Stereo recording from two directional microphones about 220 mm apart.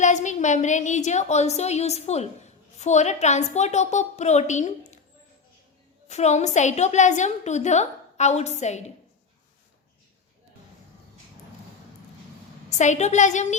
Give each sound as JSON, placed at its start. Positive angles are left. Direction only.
{"t": 0.0, "sound": "a woman's voice", "side_deg": 35}
{"t": 6.1, "sound": "a woman's voice", "side_deg": 30}
{"t": 12.7, "sound": "a woman's voice", "side_deg": 30}